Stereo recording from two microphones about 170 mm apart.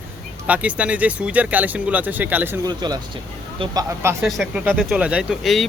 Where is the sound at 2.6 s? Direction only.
25° right (ahead or behind).